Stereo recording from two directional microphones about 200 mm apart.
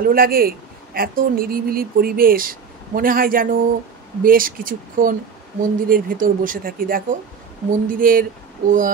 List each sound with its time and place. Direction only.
0.0 s speech: 45° right (ahead or behind)